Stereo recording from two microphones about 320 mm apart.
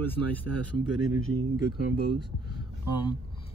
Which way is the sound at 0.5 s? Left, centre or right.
Right.